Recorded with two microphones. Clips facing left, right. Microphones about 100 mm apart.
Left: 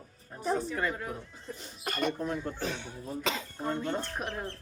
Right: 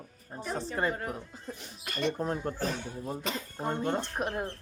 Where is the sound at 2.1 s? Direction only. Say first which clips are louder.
Right 2 dB; 35° right (ahead or behind).